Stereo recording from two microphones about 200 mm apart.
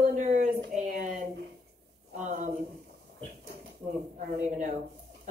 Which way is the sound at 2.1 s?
35° right (ahead or behind).